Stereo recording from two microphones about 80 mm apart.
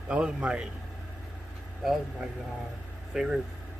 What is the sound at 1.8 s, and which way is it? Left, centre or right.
Speech, centre.